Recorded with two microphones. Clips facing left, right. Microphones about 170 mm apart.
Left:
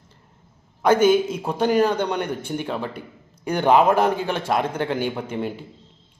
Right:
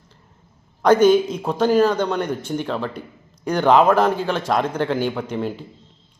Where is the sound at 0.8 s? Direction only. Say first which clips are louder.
Right 3 dB; 10° left (ahead or behind).